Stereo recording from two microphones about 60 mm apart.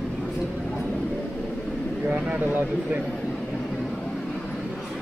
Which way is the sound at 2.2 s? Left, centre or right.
Right.